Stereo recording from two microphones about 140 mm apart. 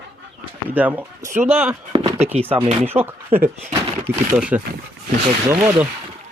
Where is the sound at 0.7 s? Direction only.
10° right (ahead or behind).